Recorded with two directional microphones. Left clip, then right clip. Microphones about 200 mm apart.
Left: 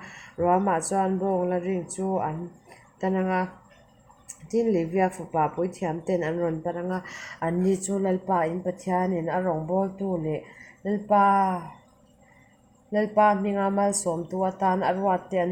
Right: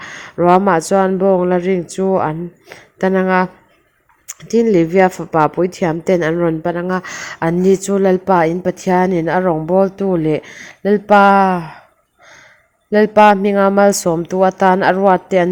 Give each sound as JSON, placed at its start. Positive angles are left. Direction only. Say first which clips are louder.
{"t": 0.0, "sound": "speech", "louder": "right 11 dB", "side_deg": -35}
{"t": 12.9, "sound": "speech", "louder": "right 12 dB", "side_deg": -40}